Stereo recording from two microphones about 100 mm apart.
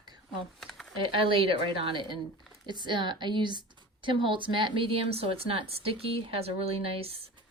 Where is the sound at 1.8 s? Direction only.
55° right (ahead or behind).